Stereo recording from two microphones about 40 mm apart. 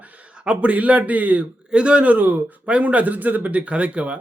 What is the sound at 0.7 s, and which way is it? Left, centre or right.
Speech, right.